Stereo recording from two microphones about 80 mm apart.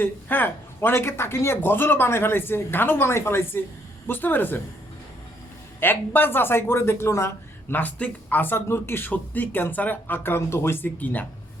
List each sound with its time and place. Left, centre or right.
0.0 s speech: left
5.8 s speech: left
7.8 s speech: centre